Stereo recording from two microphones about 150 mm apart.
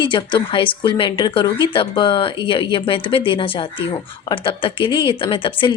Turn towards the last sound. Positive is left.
turn(degrees=35)  # may be behind; listen again after turning